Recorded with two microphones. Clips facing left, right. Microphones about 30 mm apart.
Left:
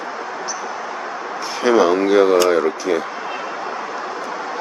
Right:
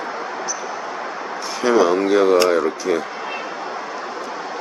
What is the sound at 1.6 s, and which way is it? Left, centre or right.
Speech, centre.